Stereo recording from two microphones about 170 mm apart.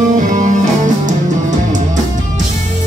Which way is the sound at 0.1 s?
50° right (ahead or behind).